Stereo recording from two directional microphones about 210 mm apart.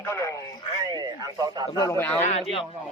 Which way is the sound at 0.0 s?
15° left (ahead or behind).